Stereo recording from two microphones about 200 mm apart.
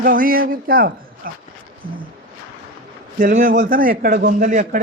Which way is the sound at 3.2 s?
45° right (ahead or behind).